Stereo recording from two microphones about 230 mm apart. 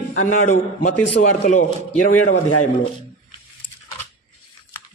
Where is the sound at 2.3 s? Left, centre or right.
Left.